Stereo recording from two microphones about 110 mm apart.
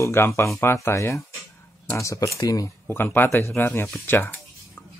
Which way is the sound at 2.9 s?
20° left (ahead or behind).